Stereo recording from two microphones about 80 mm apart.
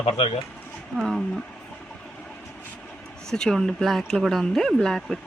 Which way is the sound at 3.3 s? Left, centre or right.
Centre.